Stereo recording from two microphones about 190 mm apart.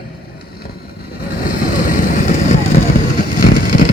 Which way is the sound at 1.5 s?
45° left (ahead or behind).